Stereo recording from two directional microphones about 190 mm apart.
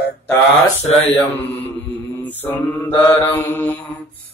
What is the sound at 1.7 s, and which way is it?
Mantra, 10° left (ahead or behind).